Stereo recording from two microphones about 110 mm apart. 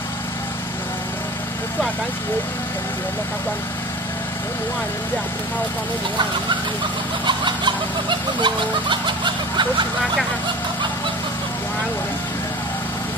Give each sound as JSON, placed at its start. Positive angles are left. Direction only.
{"t": 7.2, "sound": "snicker", "side_deg": -45}